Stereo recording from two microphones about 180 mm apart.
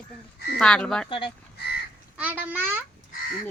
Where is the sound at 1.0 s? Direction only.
30° left (ahead or behind).